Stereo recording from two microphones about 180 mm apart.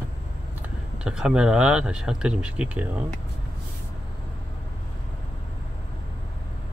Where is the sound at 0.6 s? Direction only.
5° right (ahead or behind).